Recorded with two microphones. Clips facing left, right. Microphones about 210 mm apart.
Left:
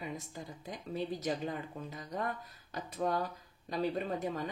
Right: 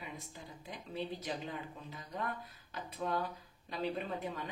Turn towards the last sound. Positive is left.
turn(degrees=45)  # may be behind; listen again after turning